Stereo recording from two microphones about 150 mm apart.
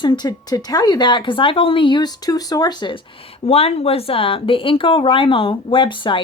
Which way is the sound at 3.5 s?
40° left (ahead or behind).